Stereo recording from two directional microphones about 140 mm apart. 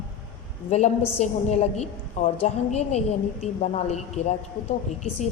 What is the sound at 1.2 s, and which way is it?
A woman's voice, 50° left (ahead or behind).